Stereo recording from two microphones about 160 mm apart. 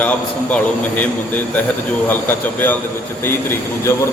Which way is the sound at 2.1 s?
10° left (ahead or behind).